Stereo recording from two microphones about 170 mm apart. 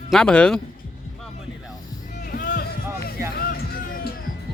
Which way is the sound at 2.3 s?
55° left (ahead or behind).